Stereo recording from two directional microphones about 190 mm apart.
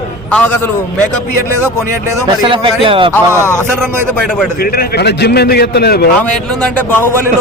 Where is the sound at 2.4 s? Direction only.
25° right (ahead or behind).